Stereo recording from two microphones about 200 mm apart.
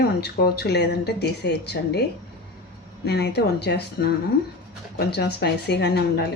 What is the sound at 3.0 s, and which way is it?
Speech, 55° left (ahead or behind).